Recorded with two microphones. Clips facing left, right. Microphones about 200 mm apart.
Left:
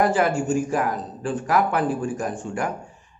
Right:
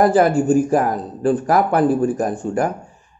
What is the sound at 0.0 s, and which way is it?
Speech, 40° right (ahead or behind).